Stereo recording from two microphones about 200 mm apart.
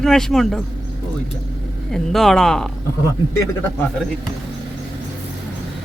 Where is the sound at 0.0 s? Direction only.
Centre (ahead or behind).